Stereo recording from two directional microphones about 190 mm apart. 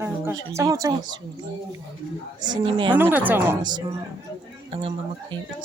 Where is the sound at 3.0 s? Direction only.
10° right (ahead or behind).